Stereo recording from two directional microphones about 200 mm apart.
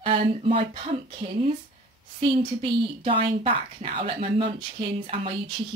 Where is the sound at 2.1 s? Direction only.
25° right (ahead or behind).